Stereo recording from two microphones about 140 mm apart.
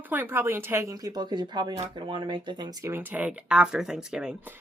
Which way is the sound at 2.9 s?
15° right (ahead or behind).